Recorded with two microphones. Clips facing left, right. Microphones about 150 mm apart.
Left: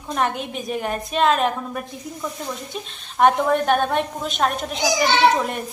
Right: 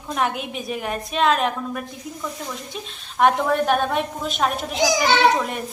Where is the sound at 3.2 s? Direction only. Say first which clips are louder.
Left 1 dB; centre (ahead or behind).